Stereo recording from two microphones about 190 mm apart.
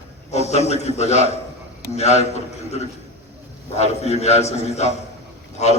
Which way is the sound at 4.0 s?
35° left (ahead or behind).